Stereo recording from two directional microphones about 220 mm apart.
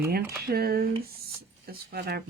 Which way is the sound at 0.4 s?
45° right (ahead or behind).